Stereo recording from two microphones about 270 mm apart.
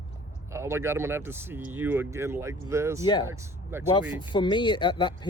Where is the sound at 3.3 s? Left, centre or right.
Centre.